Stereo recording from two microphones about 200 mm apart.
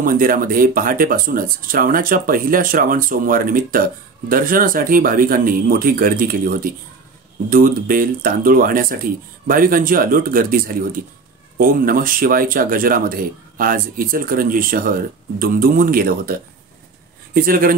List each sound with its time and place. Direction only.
0.0 s speech: 45° right (ahead or behind)